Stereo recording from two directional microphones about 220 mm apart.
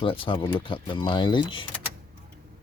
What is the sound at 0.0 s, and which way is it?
Speech, 25° left (ahead or behind).